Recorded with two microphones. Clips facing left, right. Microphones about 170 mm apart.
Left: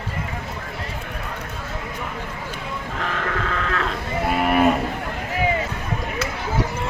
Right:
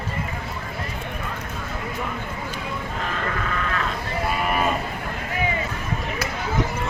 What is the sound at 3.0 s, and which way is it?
Sheep, 75° left (ahead or behind).